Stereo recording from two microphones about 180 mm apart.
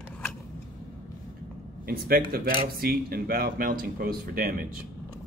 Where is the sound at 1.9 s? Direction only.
55° right (ahead or behind).